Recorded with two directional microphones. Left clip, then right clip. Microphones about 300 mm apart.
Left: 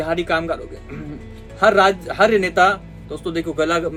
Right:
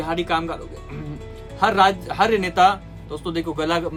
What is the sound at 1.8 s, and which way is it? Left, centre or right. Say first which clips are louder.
Speech: left 2 dB; right.